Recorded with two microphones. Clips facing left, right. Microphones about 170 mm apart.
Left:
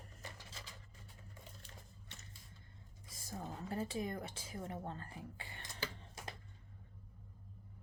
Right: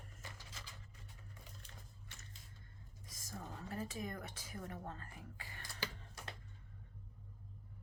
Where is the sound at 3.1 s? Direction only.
30° left (ahead or behind).